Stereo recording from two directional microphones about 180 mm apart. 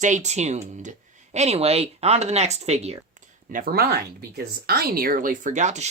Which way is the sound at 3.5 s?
50° right (ahead or behind).